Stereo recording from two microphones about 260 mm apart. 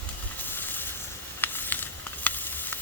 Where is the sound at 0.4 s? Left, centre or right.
Centre.